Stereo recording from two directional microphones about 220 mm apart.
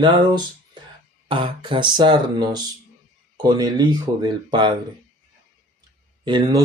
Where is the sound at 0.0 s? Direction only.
20° right (ahead or behind).